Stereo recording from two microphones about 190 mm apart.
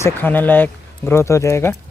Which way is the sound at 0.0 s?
10° left (ahead or behind).